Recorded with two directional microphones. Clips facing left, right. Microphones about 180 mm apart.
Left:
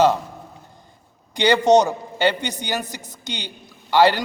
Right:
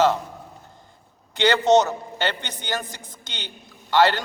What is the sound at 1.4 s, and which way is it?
A man's voice, 15° left (ahead or behind).